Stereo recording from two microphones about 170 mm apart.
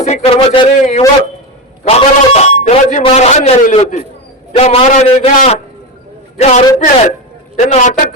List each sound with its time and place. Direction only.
0.0 s a man's voice: 40° left (ahead or behind)
6.3 s a man's voice: 45° left (ahead or behind)